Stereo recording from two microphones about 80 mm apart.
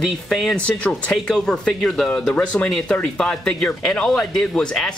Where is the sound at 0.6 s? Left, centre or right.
Centre.